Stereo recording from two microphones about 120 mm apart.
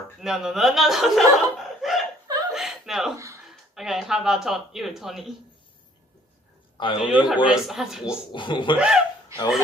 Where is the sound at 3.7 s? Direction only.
5° right (ahead or behind).